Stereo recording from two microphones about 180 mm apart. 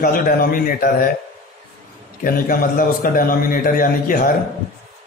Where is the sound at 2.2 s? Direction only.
50° left (ahead or behind).